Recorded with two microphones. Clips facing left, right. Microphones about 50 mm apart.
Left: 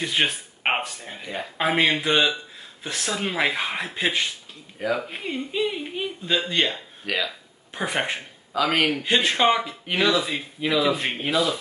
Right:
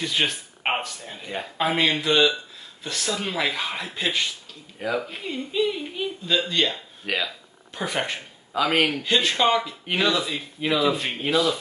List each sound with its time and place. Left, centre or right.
0.0 s speech: left
7.0 s speech: centre
7.7 s speech: left
8.5 s speech: centre
9.0 s speech: left